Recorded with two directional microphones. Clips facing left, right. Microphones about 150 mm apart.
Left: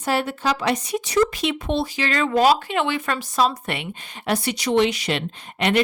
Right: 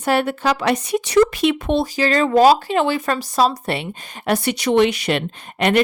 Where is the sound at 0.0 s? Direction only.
60° right (ahead or behind).